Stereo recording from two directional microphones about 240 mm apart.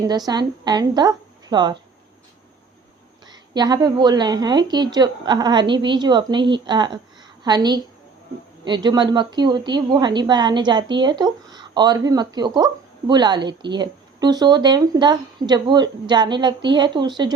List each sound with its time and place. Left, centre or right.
0.1 s speech: centre
3.2 s speech: centre